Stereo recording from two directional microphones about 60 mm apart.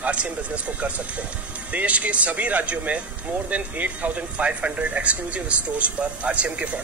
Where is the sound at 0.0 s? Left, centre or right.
Right.